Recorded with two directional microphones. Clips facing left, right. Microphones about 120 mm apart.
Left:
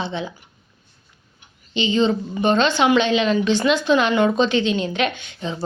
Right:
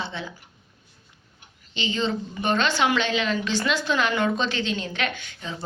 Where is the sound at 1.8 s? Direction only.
20° left (ahead or behind).